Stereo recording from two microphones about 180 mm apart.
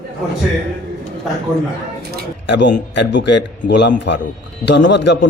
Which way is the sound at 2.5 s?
75° left (ahead or behind).